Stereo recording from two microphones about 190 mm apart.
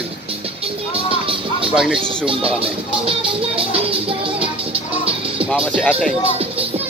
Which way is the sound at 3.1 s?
30° right (ahead or behind).